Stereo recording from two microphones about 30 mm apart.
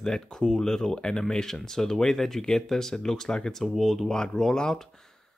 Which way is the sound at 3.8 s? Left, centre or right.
Centre.